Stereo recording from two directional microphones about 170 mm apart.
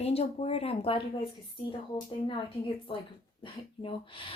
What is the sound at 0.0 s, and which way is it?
Speech, 35° left (ahead or behind).